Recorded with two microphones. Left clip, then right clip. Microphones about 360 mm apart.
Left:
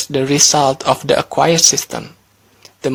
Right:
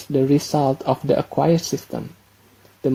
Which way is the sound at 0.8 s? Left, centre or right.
Left.